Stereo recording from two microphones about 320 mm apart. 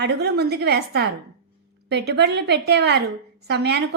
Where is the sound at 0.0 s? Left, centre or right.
Right.